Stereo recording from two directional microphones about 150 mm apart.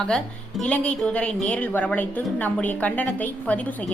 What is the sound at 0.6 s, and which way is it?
A woman's voice, 5° left (ahead or behind).